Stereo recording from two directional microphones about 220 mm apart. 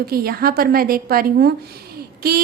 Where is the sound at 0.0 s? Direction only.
45° right (ahead or behind).